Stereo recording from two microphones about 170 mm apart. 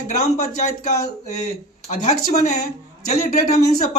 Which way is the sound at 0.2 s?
45° left (ahead or behind).